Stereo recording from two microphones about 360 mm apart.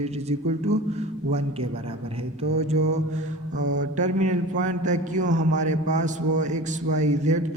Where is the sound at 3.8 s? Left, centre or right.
Centre.